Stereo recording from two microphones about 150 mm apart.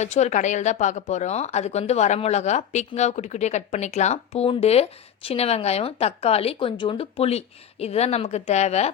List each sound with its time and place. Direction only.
0.0 s speech: 50° left (ahead or behind)